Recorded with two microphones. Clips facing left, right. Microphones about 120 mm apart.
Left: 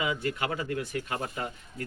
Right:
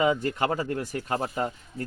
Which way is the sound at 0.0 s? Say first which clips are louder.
Right 6 dB; 40° right (ahead or behind).